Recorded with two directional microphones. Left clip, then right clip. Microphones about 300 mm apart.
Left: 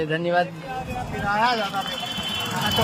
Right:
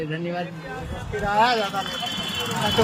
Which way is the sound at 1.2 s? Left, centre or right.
Right.